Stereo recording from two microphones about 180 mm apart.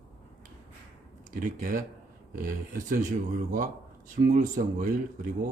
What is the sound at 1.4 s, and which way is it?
Speech, 50° right (ahead or behind).